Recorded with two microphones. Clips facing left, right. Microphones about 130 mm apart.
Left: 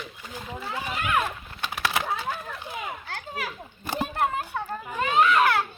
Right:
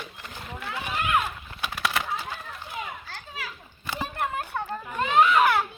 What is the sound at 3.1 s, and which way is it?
Children playing, 60° left (ahead or behind).